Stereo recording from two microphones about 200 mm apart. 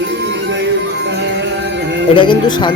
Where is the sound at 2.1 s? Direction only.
25° left (ahead or behind).